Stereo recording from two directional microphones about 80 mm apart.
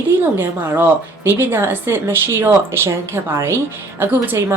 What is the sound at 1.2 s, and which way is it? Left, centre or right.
A woman's voice, right.